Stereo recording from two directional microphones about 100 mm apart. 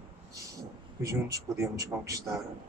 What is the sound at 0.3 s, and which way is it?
A man's voice, 35° right (ahead or behind).